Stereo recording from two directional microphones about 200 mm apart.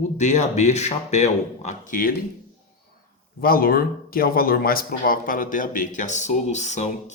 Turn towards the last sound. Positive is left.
turn(degrees=35)  # may be behind; listen again after turning